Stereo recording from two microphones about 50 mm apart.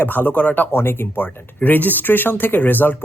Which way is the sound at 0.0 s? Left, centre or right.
Left.